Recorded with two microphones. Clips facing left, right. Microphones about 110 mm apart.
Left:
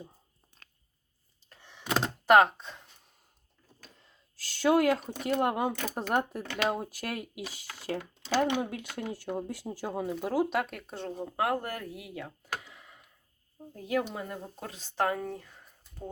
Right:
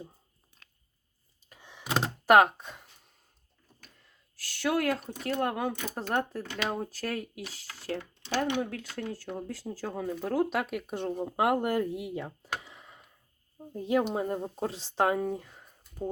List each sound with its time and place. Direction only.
1.5 s a sound: 15° right (ahead or behind)
4.0 s speech: 25° left (ahead or behind); by 14.0 s 25° right (ahead or behind)
14.1 s speech: 35° right (ahead or behind); by 16.0 s 15° right (ahead or behind)